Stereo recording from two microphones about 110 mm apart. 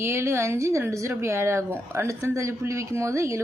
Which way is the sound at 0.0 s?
25° right (ahead or behind).